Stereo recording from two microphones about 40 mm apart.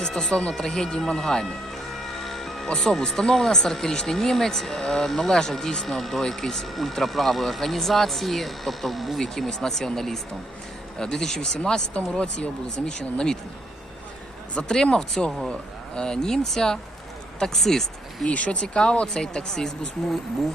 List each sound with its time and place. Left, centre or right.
0.1 s speech: centre
2.2 s music: centre
2.7 s speech: centre
11.9 s speech: left
12.8 s speech: centre
14.6 s speech: left
15.2 s speech: centre
18.3 s speech: left; by 19.9 s centre